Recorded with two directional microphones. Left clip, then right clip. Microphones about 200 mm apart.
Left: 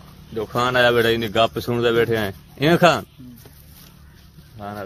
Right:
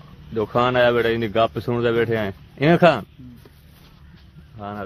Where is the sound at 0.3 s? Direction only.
30° right (ahead or behind).